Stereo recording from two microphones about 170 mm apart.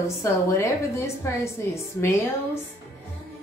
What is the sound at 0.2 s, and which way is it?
A woman's voice, 15° left (ahead or behind).